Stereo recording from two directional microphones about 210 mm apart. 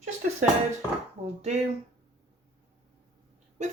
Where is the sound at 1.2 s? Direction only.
30° right (ahead or behind).